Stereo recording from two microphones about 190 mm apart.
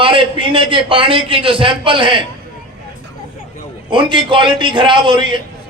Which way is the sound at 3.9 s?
25° right (ahead or behind).